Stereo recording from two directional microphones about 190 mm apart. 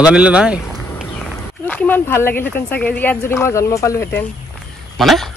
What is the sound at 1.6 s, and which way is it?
Speech, 10° left (ahead or behind).